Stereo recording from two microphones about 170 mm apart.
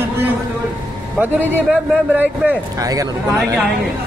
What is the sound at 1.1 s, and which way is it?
A man's voice, 5° right (ahead or behind).